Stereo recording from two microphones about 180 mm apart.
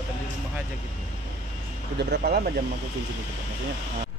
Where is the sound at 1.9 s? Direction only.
70° right (ahead or behind).